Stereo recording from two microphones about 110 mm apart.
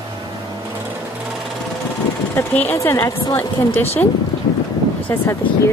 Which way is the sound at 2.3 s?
20° left (ahead or behind).